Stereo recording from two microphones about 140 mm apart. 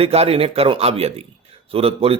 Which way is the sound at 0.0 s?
45° right (ahead or behind).